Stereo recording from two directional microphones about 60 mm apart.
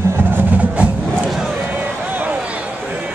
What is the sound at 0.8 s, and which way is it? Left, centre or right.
Crowd, right.